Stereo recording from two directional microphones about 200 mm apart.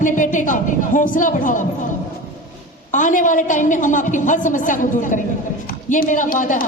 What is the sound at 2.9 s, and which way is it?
A woman's voice, 40° left (ahead or behind).